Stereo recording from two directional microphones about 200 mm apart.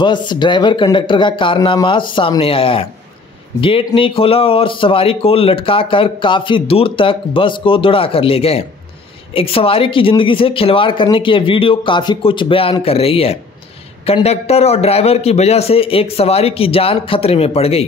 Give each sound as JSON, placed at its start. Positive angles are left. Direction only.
{"t": 0.0, "sound": "a man's voice", "side_deg": 25}